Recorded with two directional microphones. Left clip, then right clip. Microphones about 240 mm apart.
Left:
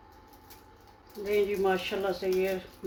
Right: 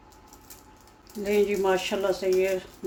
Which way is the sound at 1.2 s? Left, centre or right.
Right.